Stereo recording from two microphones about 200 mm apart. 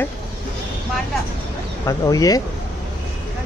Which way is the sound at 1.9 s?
20° left (ahead or behind).